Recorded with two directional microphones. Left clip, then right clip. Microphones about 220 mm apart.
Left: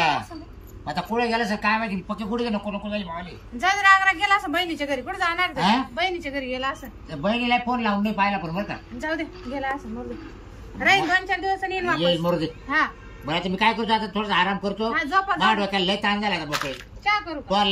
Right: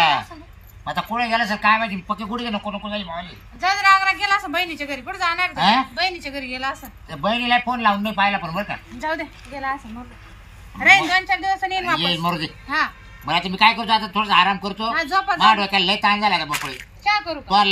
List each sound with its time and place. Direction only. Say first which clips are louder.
0.8 s a man's voice: right 2 dB; centre (ahead or behind)
3.6 s a woman's voice: right 1 dB; 15° left (ahead or behind)
9.0 s a woman's voice: right 2 dB; 15° left (ahead or behind)
10.8 s a woman's voice: right 5 dB; 10° left (ahead or behind)
12.0 s a man's voice: right 1 dB; 5° right (ahead or behind)
12.6 s a man's voice: right 2 dB; 10° left (ahead or behind)